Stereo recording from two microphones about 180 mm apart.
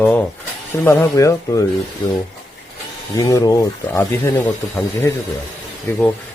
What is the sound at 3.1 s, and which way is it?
Speech, 20° left (ahead or behind).